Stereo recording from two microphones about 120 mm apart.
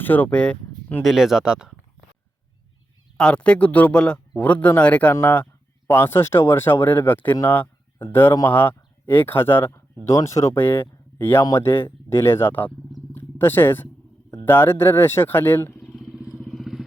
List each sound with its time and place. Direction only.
0.0 s speech: 15° left (ahead or behind)
1.0 s speech: 5° right (ahead or behind)
3.2 s speech: 10° left (ahead or behind)
15.8 s vehicle: 10° left (ahead or behind)
16.1 s vehicle: 10° right (ahead or behind)